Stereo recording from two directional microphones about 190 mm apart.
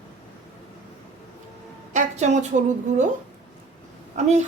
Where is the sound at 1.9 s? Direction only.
35° right (ahead or behind).